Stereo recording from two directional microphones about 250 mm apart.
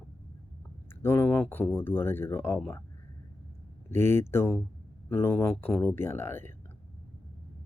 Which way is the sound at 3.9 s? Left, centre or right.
Centre.